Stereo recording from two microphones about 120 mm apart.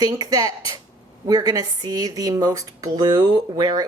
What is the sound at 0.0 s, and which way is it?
Speech, 35° right (ahead or behind).